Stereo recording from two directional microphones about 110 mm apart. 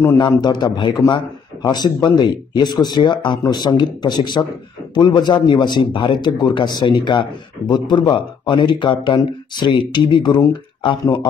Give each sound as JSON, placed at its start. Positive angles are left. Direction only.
{"t": 0.4, "sound": "a man's voice", "side_deg": 40}